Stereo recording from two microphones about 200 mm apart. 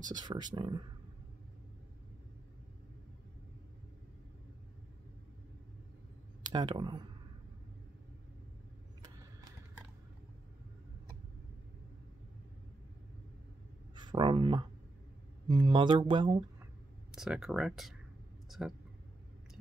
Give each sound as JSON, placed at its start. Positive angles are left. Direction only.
{"t": 0.1, "sound": "speech", "side_deg": -20}
{"t": 6.4, "sound": "speech", "side_deg": -25}
{"t": 9.0, "sound": "a sound", "side_deg": -20}
{"t": 13.9, "sound": "speech", "side_deg": -25}
{"t": 17.1, "sound": "speech", "side_deg": -5}